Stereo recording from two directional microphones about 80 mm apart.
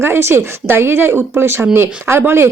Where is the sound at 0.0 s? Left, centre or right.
Right.